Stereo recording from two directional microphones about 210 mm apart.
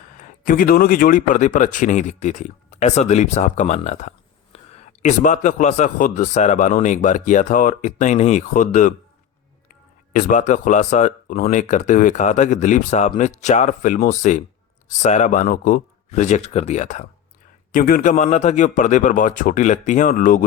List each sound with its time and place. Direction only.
0.2 s speech: 40° left (ahead or behind)